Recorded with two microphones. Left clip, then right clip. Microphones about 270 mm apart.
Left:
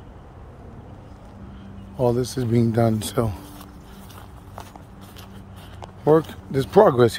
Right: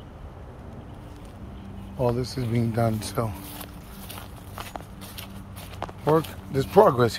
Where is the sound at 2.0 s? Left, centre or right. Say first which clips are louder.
Left 4 dB; left.